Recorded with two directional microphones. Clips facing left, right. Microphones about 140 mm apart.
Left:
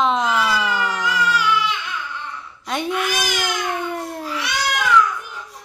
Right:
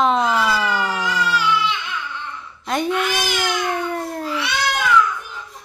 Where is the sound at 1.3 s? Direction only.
10° left (ahead or behind).